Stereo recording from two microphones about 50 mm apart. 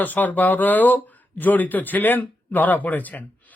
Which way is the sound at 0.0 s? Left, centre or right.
Left.